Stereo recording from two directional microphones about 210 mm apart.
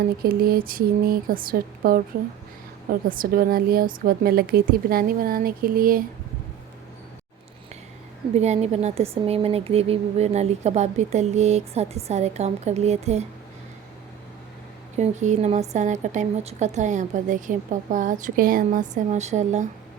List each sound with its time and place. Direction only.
0.2 s a woman's voice: 45° right (ahead or behind)
3.1 s a woman's voice: 45° right (ahead or behind)
8.4 s speech: 30° right (ahead or behind)
14.9 s speech: 35° right (ahead or behind)